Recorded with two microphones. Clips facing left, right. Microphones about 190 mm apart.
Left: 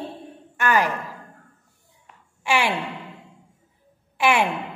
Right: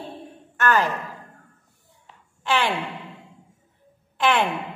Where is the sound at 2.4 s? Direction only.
10° left (ahead or behind).